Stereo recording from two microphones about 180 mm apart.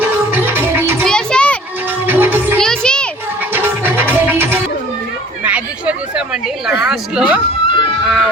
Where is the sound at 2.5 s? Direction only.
5° left (ahead or behind).